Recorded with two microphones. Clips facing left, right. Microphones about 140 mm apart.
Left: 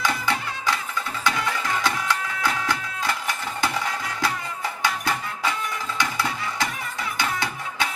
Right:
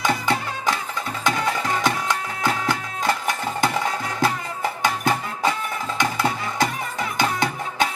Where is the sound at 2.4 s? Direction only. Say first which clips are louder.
Right 5 dB; 45° right (ahead or behind).